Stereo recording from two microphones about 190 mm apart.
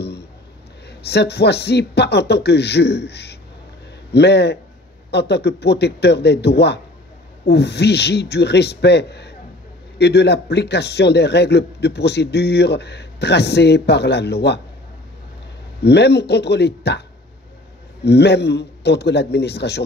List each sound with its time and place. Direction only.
0.8 s a man's voice: 60° left (ahead or behind)
15.8 s a man's voice: 60° left (ahead or behind)
18.0 s a man's voice: 60° left (ahead or behind)